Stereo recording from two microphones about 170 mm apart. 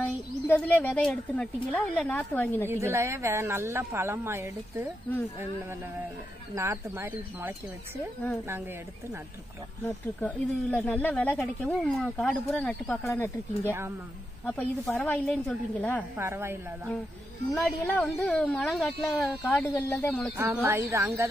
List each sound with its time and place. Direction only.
0.0 s speech: 10° left (ahead or behind)
2.7 s speech: 15° right (ahead or behind)
6.5 s speech: 15° right (ahead or behind)
9.8 s speech: 10° left (ahead or behind)
13.7 s speech: 15° right (ahead or behind)
14.4 s speech: 10° left (ahead or behind)
16.2 s speech: 15° right (ahead or behind)
17.6 s speech: 10° left (ahead or behind)
19.7 s speech: 10° left (ahead or behind)
20.3 s speech: 15° right (ahead or behind)